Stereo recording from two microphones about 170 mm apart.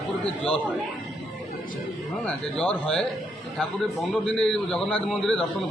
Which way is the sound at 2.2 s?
5° left (ahead or behind).